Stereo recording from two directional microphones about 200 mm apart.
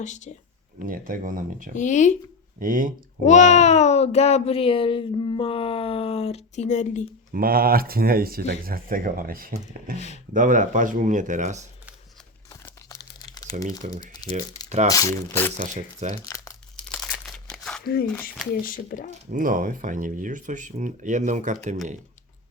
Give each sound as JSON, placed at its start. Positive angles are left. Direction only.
{"t": 0.0, "sound": "speech", "side_deg": 35}
{"t": 0.9, "sound": "speech", "side_deg": -45}
{"t": 1.7, "sound": "speech", "side_deg": 40}
{"t": 2.6, "sound": "speech", "side_deg": -45}
{"t": 3.2, "sound": "speech", "side_deg": 35}
{"t": 7.3, "sound": "speech", "side_deg": -45}
{"t": 12.6, "sound": "crumpling", "side_deg": 20}
{"t": 13.9, "sound": "speech", "side_deg": 20}
{"t": 15.5, "sound": "speech", "side_deg": -40}
{"t": 16.2, "sound": "crumpling", "side_deg": 15}
{"t": 17.8, "sound": "speech", "side_deg": 50}
{"t": 18.1, "sound": "speech", "side_deg": 5}
{"t": 18.6, "sound": "speech", "side_deg": 45}
{"t": 19.3, "sound": "speech", "side_deg": -40}